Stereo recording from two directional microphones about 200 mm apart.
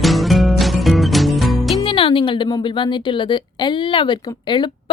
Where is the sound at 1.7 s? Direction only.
25° left (ahead or behind).